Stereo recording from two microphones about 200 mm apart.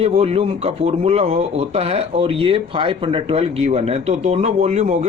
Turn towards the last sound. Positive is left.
turn(degrees=-35)  # may be behind; listen again after turning